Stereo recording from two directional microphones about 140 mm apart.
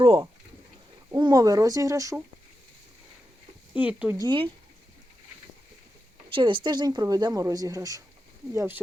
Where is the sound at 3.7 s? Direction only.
10° right (ahead or behind).